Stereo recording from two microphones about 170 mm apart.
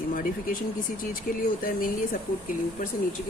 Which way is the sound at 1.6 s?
55° left (ahead or behind).